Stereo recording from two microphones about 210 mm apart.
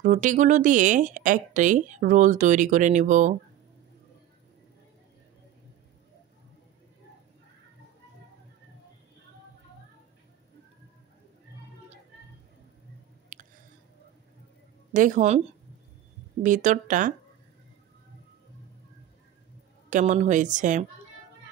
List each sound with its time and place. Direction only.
0.0 s speech: 35° right (ahead or behind)
13.3 s squish: 40° right (ahead or behind)
14.9 s speech: 40° right (ahead or behind)
16.4 s speech: 40° right (ahead or behind)
19.9 s speech: 35° right (ahead or behind)